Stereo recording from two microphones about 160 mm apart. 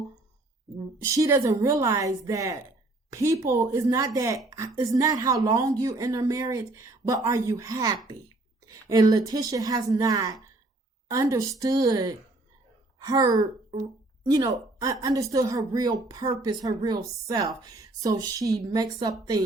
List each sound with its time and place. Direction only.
1.1 s a woman's voice: 20° right (ahead or behind)